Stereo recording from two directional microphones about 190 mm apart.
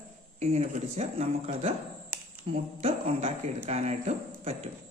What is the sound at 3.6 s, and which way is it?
Speech, 35° right (ahead or behind).